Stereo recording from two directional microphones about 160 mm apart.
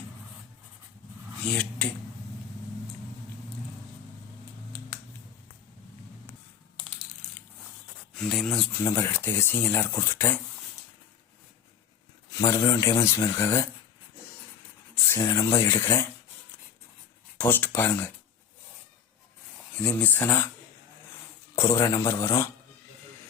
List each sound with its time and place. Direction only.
1.5 s speech: 10° left (ahead or behind)
8.1 s speech: 5° left (ahead or behind)
8.8 s speech: 15° left (ahead or behind)
12.3 s speech: 20° left (ahead or behind)
15.2 s speech: 20° left (ahead or behind)
17.3 s speech: 10° left (ahead or behind)
19.7 s speech: 10° left (ahead or behind)
21.5 s speech: 15° left (ahead or behind)